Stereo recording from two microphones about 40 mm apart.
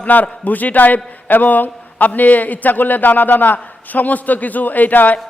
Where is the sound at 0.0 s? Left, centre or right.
Left.